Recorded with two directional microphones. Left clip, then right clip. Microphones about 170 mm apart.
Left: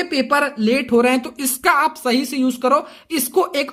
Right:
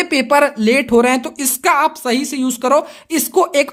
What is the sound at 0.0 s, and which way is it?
Speech, 45° right (ahead or behind).